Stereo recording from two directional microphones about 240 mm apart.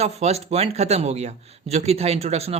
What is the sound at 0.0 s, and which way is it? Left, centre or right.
A man's voice, right.